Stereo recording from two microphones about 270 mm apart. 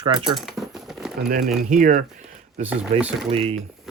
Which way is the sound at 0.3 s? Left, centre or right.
Centre.